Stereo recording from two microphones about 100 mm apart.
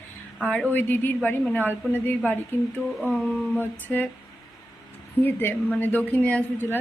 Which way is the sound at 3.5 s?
20° left (ahead or behind).